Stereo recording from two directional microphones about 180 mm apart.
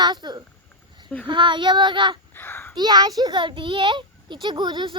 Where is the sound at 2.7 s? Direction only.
20° right (ahead or behind).